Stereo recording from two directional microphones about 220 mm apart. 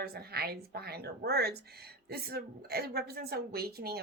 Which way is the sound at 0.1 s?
45° right (ahead or behind).